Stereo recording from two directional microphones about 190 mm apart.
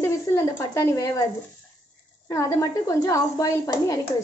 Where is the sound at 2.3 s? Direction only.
15° left (ahead or behind).